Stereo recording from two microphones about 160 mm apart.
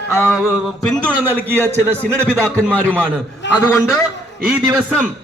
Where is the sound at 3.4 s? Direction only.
90° left.